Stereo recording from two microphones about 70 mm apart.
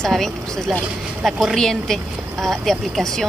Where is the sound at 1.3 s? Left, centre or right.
Centre.